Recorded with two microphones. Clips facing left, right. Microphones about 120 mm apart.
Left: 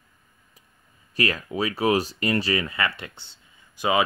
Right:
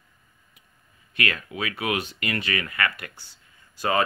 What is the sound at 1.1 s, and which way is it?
Speech, 30° left (ahead or behind).